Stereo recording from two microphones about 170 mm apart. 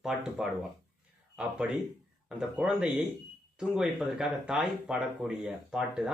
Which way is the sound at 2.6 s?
5° right (ahead or behind).